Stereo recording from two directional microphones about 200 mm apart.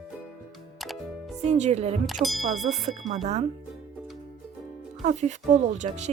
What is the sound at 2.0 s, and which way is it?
Speech, centre (ahead or behind).